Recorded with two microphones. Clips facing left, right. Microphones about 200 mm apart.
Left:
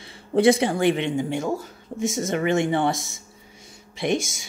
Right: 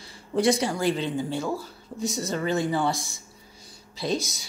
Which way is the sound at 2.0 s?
90° left.